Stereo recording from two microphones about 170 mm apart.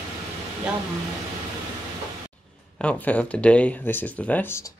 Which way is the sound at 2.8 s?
10° left (ahead or behind).